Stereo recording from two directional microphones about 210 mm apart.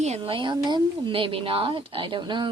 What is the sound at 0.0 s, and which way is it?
Speech, 30° right (ahead or behind).